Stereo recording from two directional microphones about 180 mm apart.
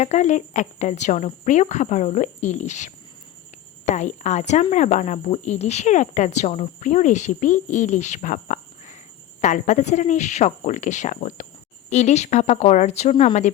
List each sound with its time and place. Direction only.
0.0 s speech: 40° left (ahead or behind)